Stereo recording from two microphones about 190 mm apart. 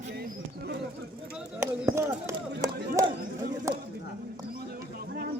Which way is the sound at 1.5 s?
15° right (ahead or behind).